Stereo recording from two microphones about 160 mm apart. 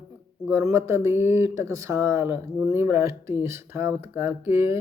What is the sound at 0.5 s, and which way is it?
Speech, 20° right (ahead or behind).